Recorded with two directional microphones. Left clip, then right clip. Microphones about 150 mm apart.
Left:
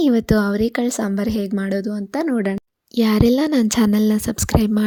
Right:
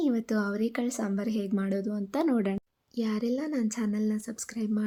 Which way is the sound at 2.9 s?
65° left (ahead or behind).